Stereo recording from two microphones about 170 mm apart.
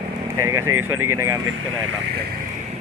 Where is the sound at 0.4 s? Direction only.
15° right (ahead or behind).